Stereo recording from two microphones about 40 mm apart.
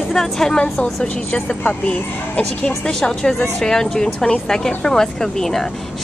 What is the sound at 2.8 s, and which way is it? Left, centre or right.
Speech, centre.